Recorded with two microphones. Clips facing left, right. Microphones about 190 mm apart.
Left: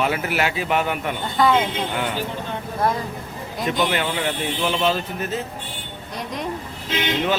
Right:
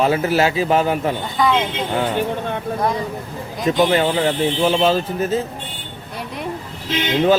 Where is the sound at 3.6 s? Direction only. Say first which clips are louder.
Right 6 dB; 25° right (ahead or behind).